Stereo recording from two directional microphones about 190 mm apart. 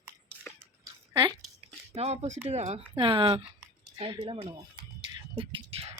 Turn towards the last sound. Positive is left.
turn(degrees=-30)  # may be behind; listen again after turning